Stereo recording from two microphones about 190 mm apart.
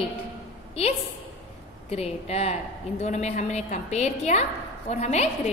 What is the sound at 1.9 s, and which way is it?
A woman's voice, 30° left (ahead or behind).